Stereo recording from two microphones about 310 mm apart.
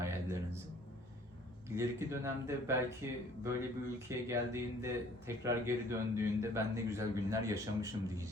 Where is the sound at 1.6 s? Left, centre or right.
Centre.